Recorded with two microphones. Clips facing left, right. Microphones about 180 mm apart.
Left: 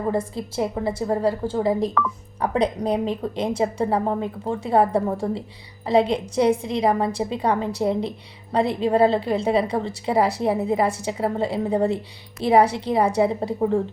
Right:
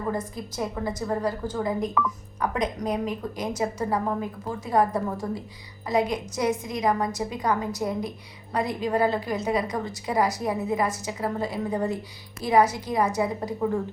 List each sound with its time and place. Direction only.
0.0 s a woman's voice: 30° left (ahead or behind)